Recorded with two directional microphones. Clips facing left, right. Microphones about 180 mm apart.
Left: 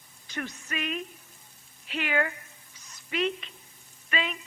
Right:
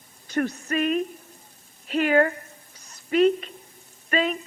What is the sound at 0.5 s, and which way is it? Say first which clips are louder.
Speech: right 10 dB; 40° right (ahead or behind).